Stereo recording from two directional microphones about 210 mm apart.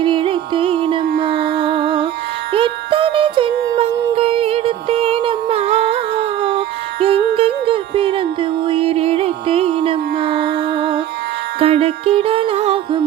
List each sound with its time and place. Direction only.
0.0 s music: 25° right (ahead or behind)
7.0 s music: 25° right (ahead or behind)